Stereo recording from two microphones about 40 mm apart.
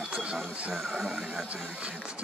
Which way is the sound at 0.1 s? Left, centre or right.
Right.